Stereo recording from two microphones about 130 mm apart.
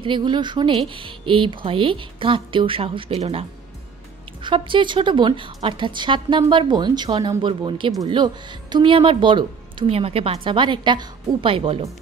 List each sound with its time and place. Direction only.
0.0 s speech: 40° right (ahead or behind)